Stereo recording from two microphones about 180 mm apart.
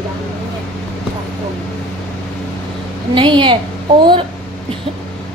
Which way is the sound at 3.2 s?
25° right (ahead or behind).